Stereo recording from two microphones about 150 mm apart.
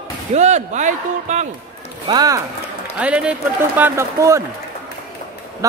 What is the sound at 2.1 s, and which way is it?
Speech, 25° right (ahead or behind).